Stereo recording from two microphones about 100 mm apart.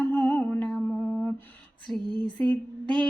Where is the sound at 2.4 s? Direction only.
55° right (ahead or behind).